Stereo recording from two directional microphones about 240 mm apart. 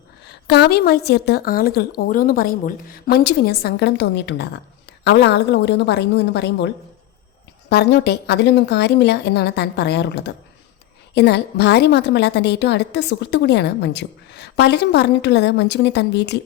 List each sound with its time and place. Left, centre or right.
0.3 s a woman's voice: left
7.7 s a woman's voice: left